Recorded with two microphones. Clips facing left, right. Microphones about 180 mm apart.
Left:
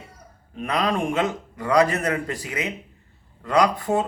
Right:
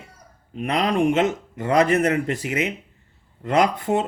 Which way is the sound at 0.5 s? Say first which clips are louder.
Right 2 dB; 25° right (ahead or behind).